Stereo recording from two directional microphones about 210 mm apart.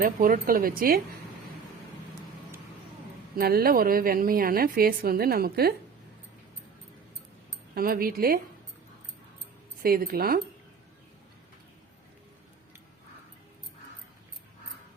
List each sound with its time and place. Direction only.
0.0 s a woman's voice: 45° right (ahead or behind)
3.3 s a woman's voice: 45° right (ahead or behind)
7.8 s a woman's voice: 45° right (ahead or behind)
9.8 s a woman's voice: 45° right (ahead or behind)